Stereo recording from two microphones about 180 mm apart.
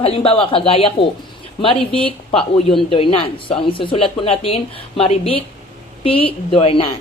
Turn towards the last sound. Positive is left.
turn(degrees=30)  # may be behind; listen again after turning